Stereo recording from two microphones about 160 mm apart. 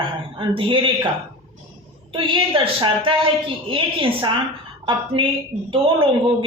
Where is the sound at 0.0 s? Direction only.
35° right (ahead or behind).